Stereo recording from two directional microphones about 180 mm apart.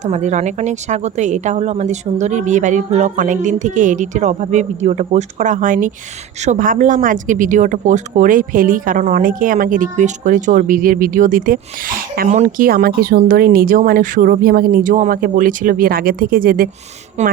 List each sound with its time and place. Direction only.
0.0 s speech: 40° right (ahead or behind)
17.2 s speech: 40° right (ahead or behind)